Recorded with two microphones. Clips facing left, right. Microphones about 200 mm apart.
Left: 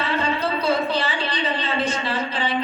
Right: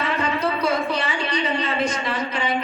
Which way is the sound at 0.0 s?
30° left (ahead or behind).